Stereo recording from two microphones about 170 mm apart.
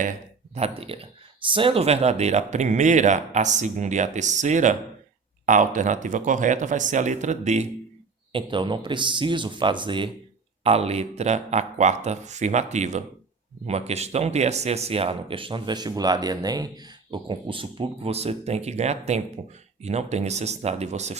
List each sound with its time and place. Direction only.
0.0 s speech: 45° right (ahead or behind)
8.3 s speech: 30° right (ahead or behind)